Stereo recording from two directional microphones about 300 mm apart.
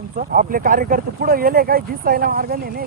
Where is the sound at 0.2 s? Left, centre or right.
Right.